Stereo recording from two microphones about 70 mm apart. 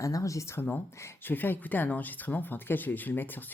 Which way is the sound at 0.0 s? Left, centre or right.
Left.